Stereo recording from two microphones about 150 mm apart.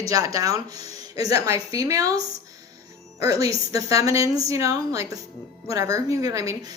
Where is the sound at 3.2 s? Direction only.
20° right (ahead or behind).